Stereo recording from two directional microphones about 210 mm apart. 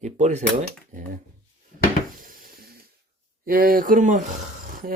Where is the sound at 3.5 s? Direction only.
40° right (ahead or behind).